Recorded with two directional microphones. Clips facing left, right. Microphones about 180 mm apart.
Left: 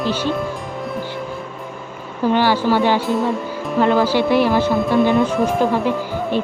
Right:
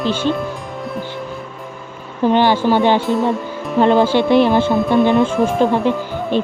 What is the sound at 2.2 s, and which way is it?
Speech, 20° right (ahead or behind).